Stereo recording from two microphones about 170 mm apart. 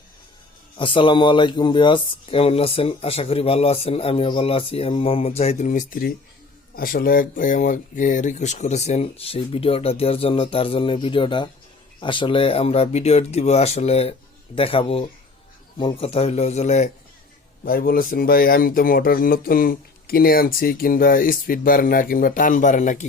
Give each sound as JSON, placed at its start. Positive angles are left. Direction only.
{"t": 0.8, "sound": "speech", "side_deg": 30}
{"t": 17.7, "sound": "speech", "side_deg": 55}